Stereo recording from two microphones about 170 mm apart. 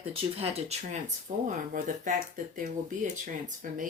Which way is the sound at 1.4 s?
50° right (ahead or behind).